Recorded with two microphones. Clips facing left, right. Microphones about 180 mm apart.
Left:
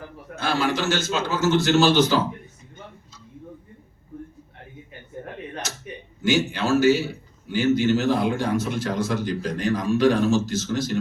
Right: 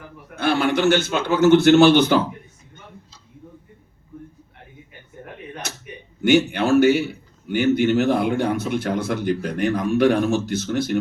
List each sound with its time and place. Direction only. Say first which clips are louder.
0.3 s a man's voice: right 4 dB; 60° right (ahead or behind)
5.6 s a sound: right 1 dB; 60° right (ahead or behind)
6.2 s a man's voice: right 5 dB; 60° right (ahead or behind)